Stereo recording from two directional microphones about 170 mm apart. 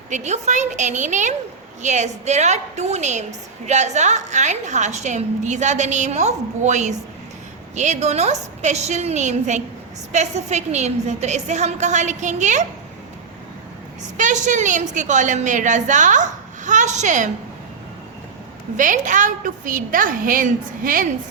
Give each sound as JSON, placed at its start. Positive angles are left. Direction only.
{"t": 0.1, "sound": "a woman's voice", "side_deg": -45}
{"t": 14.2, "sound": "a woman's voice", "side_deg": -45}
{"t": 18.8, "sound": "a woman's voice", "side_deg": -50}